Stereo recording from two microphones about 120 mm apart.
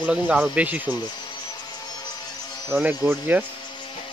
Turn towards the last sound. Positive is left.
turn(degrees=-15)  # may be behind; listen again after turning